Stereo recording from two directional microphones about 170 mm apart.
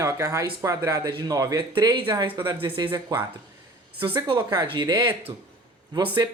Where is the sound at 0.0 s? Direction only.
15° right (ahead or behind).